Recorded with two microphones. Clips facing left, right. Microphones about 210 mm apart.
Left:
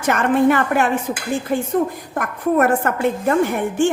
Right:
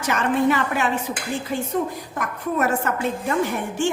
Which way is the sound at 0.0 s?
55° left (ahead or behind).